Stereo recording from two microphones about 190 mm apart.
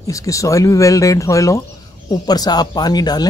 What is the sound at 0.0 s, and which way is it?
Speech, 15° left (ahead or behind).